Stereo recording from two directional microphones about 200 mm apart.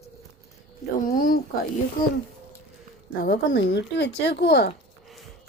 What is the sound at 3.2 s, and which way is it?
Speech, 50° left (ahead or behind).